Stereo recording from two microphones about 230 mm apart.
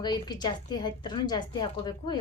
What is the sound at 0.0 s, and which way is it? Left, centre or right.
A woman's voice, centre.